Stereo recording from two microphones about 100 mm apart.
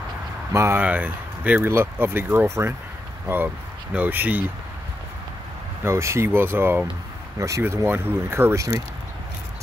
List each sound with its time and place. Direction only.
0.5 s speech: 25° right (ahead or behind)
0.8 s speech: 15° right (ahead or behind)
3.3 s speech: 15° right (ahead or behind)
5.9 s speech: 25° right (ahead or behind)